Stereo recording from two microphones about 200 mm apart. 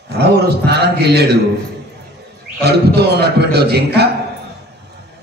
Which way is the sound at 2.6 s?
55° right (ahead or behind).